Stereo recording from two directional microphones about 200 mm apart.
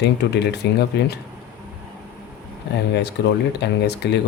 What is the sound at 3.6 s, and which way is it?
Speech, 60° left (ahead or behind).